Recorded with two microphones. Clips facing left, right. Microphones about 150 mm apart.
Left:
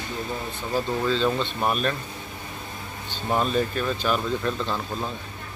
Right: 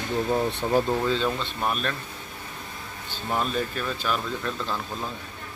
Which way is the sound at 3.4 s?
Centre (ahead or behind).